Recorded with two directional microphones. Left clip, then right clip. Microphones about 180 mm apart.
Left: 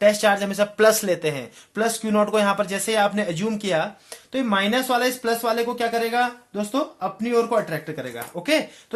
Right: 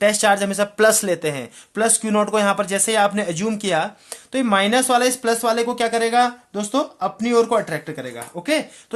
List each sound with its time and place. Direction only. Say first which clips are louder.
0.0 s speech: right 1 dB; 25° right (ahead or behind)